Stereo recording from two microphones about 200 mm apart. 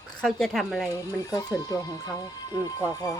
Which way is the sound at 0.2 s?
Centre (ahead or behind).